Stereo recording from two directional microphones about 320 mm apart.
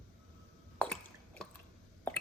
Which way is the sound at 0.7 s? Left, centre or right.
Centre.